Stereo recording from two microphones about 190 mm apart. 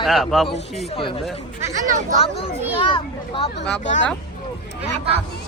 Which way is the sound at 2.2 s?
30° left (ahead or behind).